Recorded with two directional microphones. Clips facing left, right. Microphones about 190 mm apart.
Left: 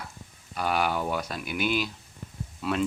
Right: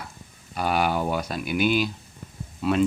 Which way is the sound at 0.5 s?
5° right (ahead or behind).